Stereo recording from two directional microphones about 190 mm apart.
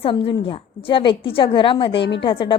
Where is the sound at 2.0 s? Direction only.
65° left (ahead or behind).